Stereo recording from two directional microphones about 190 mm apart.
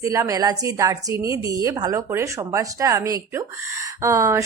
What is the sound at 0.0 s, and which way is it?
A woman's voice, 15° right (ahead or behind).